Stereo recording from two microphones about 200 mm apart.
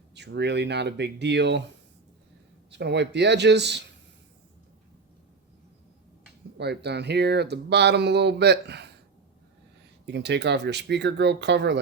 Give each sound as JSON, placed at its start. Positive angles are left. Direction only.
{"t": 0.1, "sound": "speech", "side_deg": -55}
{"t": 6.6, "sound": "speech", "side_deg": -55}
{"t": 10.1, "sound": "speech", "side_deg": -60}